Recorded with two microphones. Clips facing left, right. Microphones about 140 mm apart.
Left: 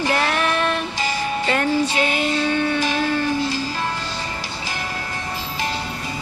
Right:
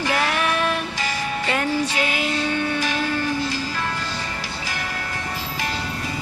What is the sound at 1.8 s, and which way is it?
Music, 25° left (ahead or behind).